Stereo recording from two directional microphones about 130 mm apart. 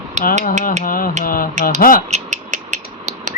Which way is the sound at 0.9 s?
90° left.